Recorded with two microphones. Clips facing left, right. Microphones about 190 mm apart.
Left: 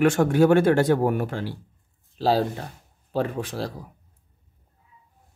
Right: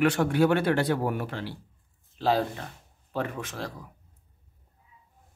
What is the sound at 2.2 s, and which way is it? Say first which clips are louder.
Speech: left 4 dB; 35° left (ahead or behind).